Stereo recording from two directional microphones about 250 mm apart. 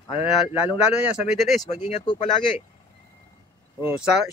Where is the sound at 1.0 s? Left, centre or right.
Centre.